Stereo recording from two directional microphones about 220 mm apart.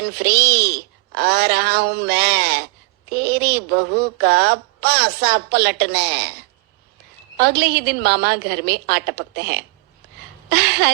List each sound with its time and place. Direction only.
0.0 s a woman's voice: 45° right (ahead or behind)